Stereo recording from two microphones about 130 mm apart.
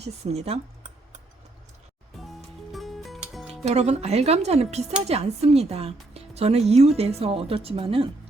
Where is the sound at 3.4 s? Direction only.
55° right (ahead or behind).